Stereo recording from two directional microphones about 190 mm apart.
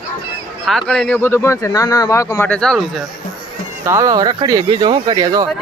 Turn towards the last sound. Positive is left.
turn(degrees=-20)  # may be behind; listen again after turning